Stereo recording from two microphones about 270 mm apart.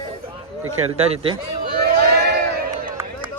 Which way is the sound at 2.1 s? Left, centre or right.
Right.